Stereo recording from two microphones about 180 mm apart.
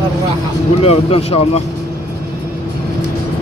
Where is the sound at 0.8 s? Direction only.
35° left (ahead or behind).